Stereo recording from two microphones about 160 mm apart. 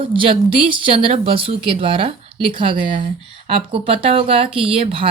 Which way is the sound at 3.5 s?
35° right (ahead or behind).